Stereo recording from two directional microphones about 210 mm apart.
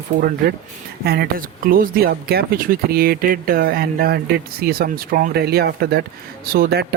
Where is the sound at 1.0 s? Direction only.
50° right (ahead or behind).